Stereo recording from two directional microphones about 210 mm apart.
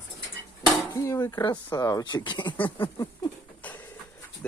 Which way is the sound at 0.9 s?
15° left (ahead or behind).